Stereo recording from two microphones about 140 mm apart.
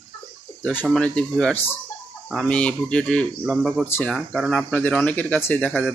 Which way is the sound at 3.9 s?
10° left (ahead or behind).